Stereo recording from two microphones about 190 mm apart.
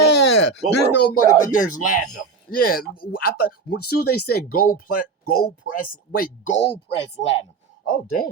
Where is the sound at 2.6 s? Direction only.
50° left (ahead or behind).